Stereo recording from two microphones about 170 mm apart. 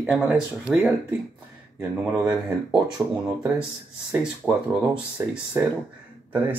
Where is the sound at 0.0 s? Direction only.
10° right (ahead or behind).